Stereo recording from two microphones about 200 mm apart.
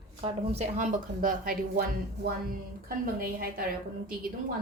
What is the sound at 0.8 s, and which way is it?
Speech, 40° right (ahead or behind).